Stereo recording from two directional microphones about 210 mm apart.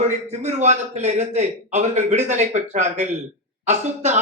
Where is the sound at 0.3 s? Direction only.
35° right (ahead or behind).